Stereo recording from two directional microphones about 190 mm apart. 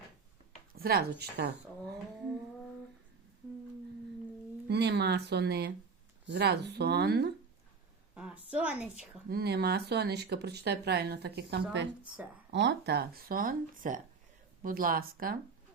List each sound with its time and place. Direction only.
0.7 s speech: 50° right (ahead or behind)
4.7 s speech: 60° right (ahead or behind)
8.1 s a woman's voice: 5° right (ahead or behind)
9.3 s speech: 55° right (ahead or behind)